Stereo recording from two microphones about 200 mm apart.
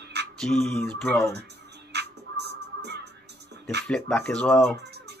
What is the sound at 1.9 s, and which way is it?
Music, 55° right (ahead or behind).